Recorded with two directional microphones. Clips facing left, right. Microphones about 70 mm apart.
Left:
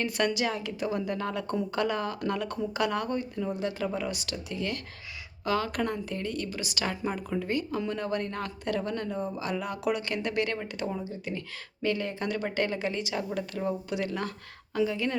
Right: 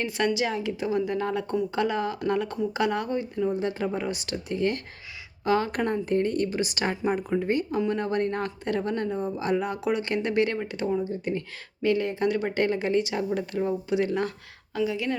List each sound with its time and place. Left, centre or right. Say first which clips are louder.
0.3 s speech: right 3 dB; centre; by 6.9 s right
6.9 s speech: right 5 dB; right
11.8 s speech: right 6 dB; right
14.8 s speech: right 1 dB; centre